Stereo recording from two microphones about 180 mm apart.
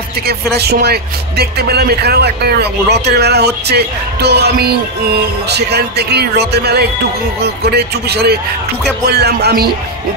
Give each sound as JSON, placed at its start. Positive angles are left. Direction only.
{"t": 0.3, "sound": "speech", "side_deg": -65}